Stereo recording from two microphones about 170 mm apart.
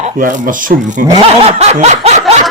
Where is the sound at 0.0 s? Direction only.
50° right (ahead or behind).